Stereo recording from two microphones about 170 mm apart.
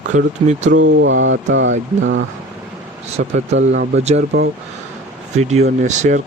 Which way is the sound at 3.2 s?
60° right (ahead or behind).